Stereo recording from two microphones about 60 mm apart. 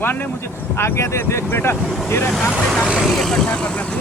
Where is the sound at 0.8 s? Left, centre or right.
Left.